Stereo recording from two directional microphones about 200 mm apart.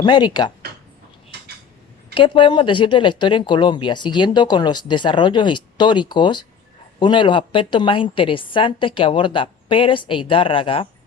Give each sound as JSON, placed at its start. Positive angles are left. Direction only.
{"t": 0.0, "sound": "speech", "side_deg": 20}
{"t": 2.1, "sound": "speech", "side_deg": 25}